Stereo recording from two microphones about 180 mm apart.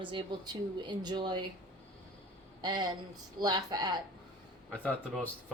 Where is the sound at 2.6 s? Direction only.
25° right (ahead or behind).